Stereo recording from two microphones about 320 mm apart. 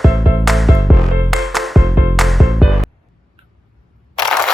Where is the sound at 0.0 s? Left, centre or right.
Centre.